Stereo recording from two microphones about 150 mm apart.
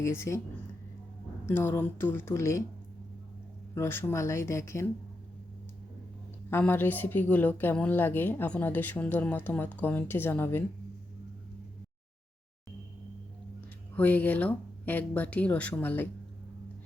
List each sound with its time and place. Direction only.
0.0 s speech: 20° left (ahead or behind)
1.5 s speech: 15° left (ahead or behind)
3.8 s speech: 15° left (ahead or behind)
6.5 s speech: 15° left (ahead or behind)
13.9 s speech: 10° left (ahead or behind)